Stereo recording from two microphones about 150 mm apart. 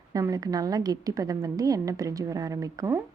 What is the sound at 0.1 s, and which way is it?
A woman's voice, 25° right (ahead or behind).